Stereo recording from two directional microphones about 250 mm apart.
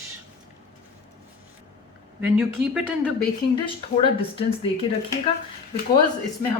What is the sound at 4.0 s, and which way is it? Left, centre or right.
Speech, left.